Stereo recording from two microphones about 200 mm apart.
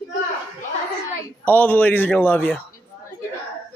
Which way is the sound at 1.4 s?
10° left (ahead or behind).